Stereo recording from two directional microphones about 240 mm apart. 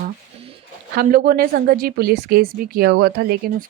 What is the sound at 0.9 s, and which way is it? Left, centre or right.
Speech, right.